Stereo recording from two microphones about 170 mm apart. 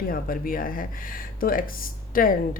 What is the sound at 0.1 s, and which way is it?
Speech, 55° left (ahead or behind).